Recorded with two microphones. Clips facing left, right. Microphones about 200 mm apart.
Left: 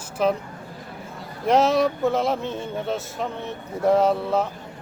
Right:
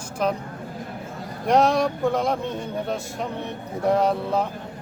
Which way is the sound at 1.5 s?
5° left (ahead or behind).